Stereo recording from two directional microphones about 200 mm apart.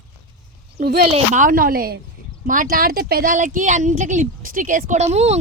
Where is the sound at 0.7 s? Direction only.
50° right (ahead or behind).